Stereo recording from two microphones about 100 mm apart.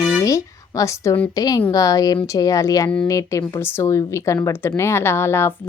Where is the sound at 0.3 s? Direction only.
35° left (ahead or behind).